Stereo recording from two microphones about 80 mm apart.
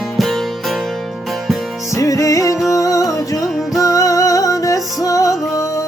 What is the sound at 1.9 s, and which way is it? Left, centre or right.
Music, left.